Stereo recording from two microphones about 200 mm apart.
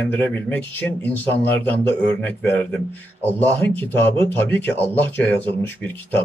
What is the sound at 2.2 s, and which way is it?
Speech, 10° left (ahead or behind).